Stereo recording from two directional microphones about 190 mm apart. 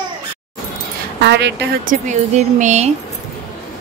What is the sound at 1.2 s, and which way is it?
Speech, 65° right (ahead or behind).